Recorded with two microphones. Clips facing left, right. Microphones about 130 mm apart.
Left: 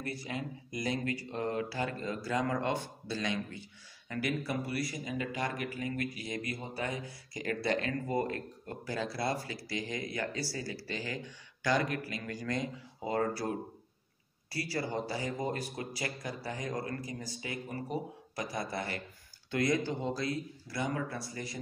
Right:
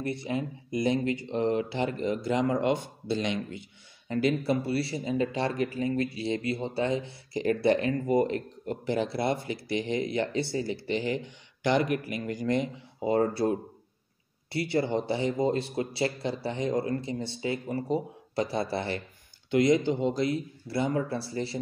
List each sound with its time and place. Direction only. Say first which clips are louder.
0.0 s speech: right 7 dB; 25° right (ahead or behind)